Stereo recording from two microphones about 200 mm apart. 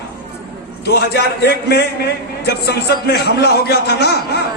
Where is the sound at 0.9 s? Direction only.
55° left (ahead or behind).